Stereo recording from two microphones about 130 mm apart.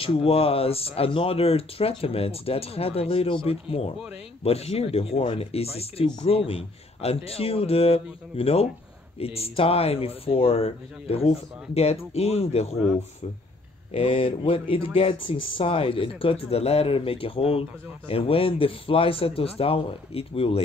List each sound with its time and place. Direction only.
0.0 s speech: 50° left (ahead or behind)
13.9 s speech: 45° left (ahead or behind)